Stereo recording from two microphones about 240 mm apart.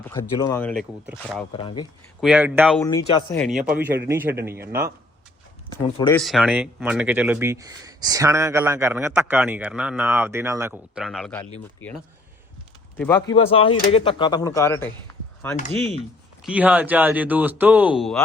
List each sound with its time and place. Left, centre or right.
0.0 s speech: centre
1.5 s speech: centre
2.2 s speech: centre
3.2 s speech: centre
3.4 s speech: centre
5.8 s speech: centre
6.1 s speech: centre
13.0 s speech: centre
13.3 s speech: left
16.5 s speech: centre